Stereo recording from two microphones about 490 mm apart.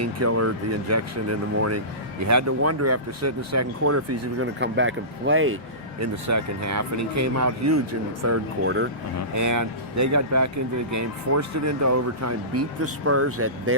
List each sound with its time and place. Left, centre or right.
0.0 s speech: right
9.3 s speech: right